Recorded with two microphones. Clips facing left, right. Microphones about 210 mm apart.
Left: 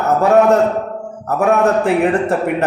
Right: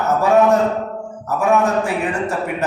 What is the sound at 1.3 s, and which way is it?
A man's voice, 60° left (ahead or behind).